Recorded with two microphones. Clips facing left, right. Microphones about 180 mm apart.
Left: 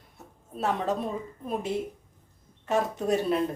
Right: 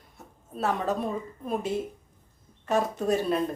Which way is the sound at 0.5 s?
20° left (ahead or behind).